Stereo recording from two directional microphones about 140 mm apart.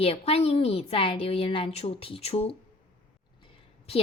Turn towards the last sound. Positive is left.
turn(degrees=45)  # may be behind; listen again after turning